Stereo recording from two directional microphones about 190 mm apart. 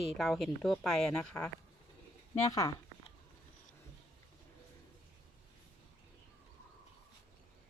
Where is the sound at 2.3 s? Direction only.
15° left (ahead or behind).